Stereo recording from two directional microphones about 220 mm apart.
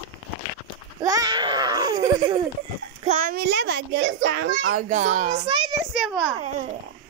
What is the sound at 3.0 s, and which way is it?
A child's voice, 40° right (ahead or behind).